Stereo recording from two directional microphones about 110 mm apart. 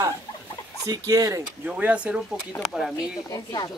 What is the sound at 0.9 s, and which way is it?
Speech, 30° right (ahead or behind).